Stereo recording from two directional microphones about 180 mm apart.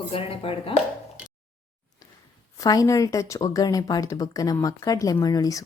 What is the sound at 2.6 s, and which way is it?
Speech, 20° left (ahead or behind).